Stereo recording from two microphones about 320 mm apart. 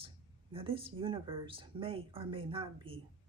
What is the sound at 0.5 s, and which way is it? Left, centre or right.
Speech, centre.